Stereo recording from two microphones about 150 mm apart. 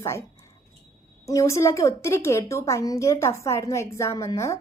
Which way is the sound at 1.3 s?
20° left (ahead or behind).